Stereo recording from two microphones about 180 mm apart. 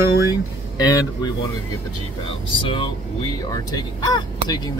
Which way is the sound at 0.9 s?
20° left (ahead or behind).